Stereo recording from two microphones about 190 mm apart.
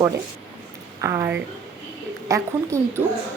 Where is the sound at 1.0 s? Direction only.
15° right (ahead or behind).